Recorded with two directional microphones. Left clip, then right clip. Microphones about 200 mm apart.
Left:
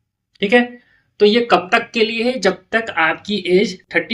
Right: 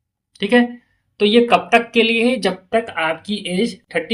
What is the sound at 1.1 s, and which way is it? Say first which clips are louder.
Speech: left 1 dB; 35° right (ahead or behind).